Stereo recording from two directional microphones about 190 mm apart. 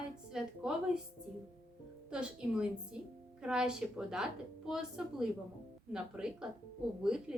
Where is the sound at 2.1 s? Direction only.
5° right (ahead or behind).